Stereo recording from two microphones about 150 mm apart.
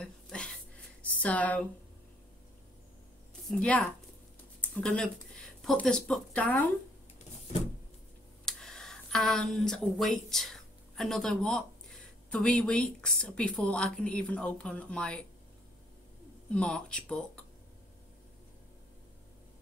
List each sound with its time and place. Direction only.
0.0 s a sound: 5° left (ahead or behind)
1.2 s a woman's voice: 10° left (ahead or behind)
3.4 s a woman's voice: 5° left (ahead or behind)
8.5 s speech: 5° left (ahead or behind)
16.4 s a woman's voice: 5° left (ahead or behind)